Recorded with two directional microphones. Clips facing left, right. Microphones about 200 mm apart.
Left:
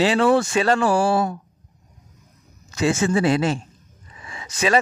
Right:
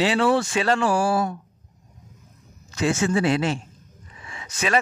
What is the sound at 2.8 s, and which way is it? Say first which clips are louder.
Speech: left 2 dB; 35° left (ahead or behind).